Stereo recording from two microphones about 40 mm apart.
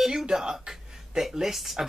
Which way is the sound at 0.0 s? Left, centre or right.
Centre.